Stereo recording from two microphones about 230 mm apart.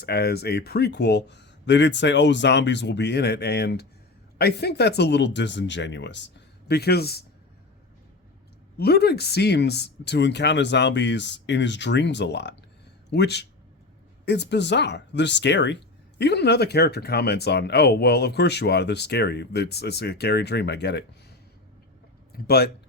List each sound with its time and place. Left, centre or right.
0.0 s speech: left
8.8 s speech: left
22.3 s speech: left